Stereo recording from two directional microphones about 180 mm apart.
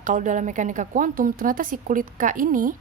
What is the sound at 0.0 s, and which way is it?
A woman's voice, 45° right (ahead or behind).